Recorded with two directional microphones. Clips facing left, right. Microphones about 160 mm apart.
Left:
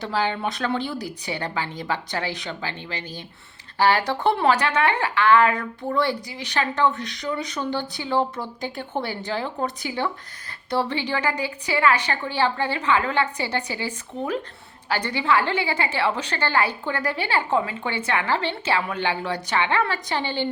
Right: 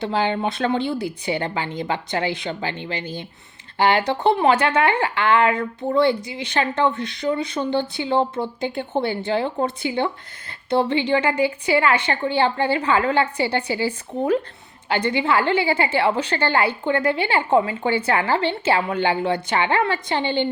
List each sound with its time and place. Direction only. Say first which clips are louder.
0.0 s speech: right 3 dB; 25° right (ahead or behind)